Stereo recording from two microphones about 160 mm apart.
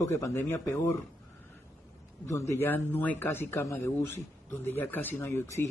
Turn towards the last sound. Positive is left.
turn(degrees=15)  # may be behind; listen again after turning